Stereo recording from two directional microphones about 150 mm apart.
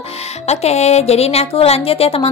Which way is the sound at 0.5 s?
45° left (ahead or behind).